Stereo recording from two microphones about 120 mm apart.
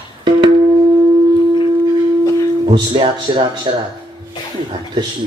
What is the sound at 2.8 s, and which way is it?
Speech, 45° right (ahead or behind).